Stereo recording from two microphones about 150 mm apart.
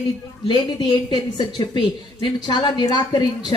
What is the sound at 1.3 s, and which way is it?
Speech, 30° left (ahead or behind).